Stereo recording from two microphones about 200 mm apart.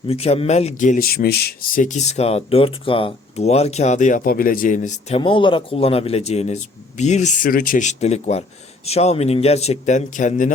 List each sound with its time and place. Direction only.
0.1 s speech: 30° left (ahead or behind)